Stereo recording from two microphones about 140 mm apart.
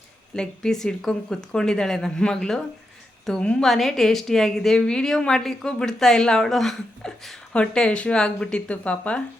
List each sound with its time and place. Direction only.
0.3 s a woman's voice: 5° left (ahead or behind)